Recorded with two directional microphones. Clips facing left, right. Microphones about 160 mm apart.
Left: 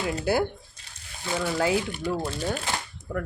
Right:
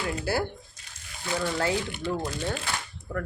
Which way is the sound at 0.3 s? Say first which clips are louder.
Left 4 dB; 15° left (ahead or behind).